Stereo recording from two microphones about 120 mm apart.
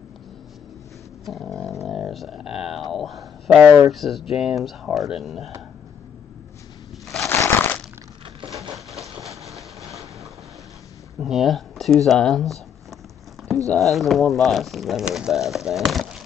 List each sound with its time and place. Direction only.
1.2 s speech: centre (ahead or behind)
7.2 s crushing: 20° left (ahead or behind)
8.7 s a sound: centre (ahead or behind)
11.1 s speech: centre (ahead or behind)
13.7 s speech: centre (ahead or behind)